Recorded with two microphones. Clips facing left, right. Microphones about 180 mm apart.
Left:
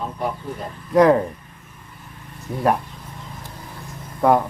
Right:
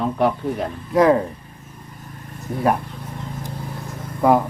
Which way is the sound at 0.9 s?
Centre (ahead or behind).